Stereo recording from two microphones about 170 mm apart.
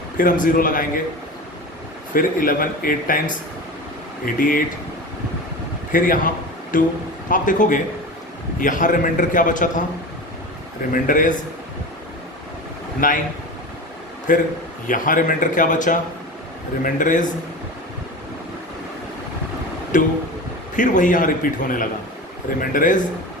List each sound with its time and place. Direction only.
0.2 s a man's voice: 55° left (ahead or behind)
2.1 s speech: 55° left (ahead or behind)
4.4 s a man's voice: 55° left (ahead or behind)
5.9 s a man's voice: 55° left (ahead or behind)
10.9 s a man's voice: 55° left (ahead or behind)
13.0 s a man's voice: 55° left (ahead or behind)
14.3 s a man's voice: 50° left (ahead or behind)
19.9 s a man's voice: 50° left (ahead or behind)